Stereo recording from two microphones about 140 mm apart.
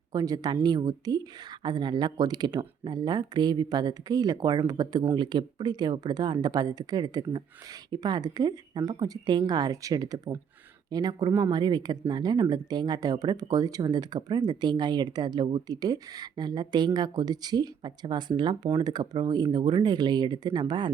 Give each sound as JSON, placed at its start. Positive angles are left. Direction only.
{"t": 0.1, "sound": "speech", "side_deg": -25}